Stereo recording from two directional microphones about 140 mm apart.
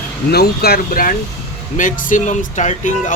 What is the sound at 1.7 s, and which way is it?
Speech, 70° left (ahead or behind).